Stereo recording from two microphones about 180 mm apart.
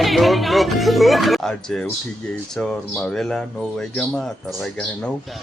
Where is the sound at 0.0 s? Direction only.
Centre (ahead or behind).